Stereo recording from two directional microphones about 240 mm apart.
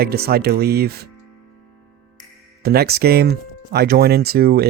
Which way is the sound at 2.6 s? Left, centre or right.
Right.